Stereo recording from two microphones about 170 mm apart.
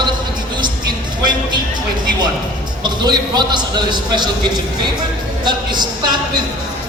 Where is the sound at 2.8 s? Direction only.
25° right (ahead or behind).